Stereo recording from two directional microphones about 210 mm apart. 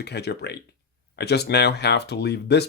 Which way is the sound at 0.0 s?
50° left (ahead or behind).